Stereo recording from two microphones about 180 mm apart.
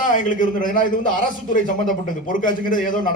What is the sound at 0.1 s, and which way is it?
A man's voice, 45° left (ahead or behind).